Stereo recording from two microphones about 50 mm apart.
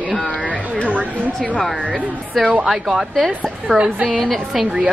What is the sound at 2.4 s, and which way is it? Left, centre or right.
A woman's voice, centre.